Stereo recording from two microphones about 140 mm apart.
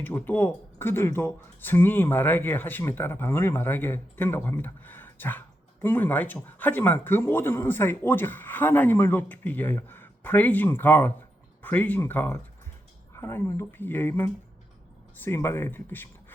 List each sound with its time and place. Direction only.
0.0 s speech: 15° left (ahead or behind)